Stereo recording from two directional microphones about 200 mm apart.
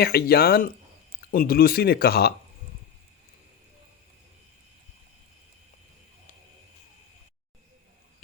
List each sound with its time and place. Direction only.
0.0 s speech: 50° left (ahead or behind)